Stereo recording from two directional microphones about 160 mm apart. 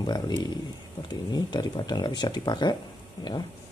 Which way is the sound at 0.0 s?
25° left (ahead or behind).